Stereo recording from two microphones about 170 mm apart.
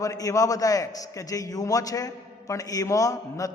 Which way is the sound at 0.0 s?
20° left (ahead or behind).